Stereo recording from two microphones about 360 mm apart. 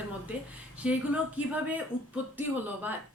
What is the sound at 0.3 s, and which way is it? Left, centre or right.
Speech, centre.